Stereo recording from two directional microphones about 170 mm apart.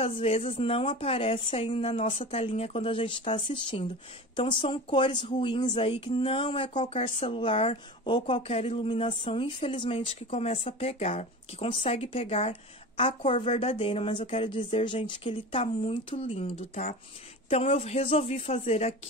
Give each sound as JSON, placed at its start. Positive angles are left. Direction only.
{"t": 0.0, "sound": "speech", "side_deg": 35}